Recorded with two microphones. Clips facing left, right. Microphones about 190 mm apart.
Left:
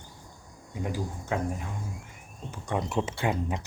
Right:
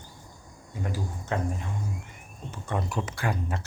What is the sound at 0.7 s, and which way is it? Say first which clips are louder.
Speech: left 1 dB; 15° left (ahead or behind).